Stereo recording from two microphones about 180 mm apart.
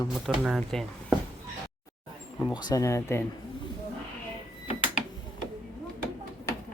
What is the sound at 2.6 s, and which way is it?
Speech, 20° left (ahead or behind).